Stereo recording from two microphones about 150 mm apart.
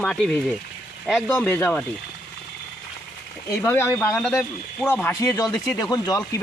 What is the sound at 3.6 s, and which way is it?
Speech, 15° left (ahead or behind).